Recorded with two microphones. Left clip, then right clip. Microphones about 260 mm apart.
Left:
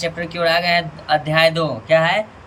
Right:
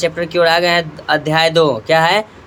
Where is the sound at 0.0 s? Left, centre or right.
Centre.